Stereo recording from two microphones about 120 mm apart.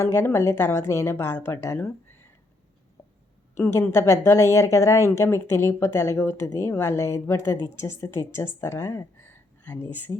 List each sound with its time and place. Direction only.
0.0 s speech: 20° left (ahead or behind)
3.5 s speech: 20° left (ahead or behind)